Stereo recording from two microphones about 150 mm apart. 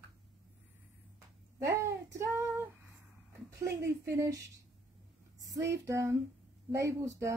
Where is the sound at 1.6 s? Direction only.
20° right (ahead or behind).